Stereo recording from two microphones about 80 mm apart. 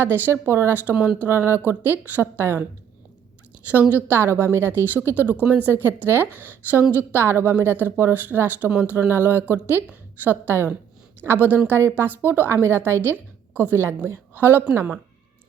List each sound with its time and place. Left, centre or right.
0.0 s a woman's voice: right
0.9 s a woman's voice: centre
3.7 s a woman's voice: right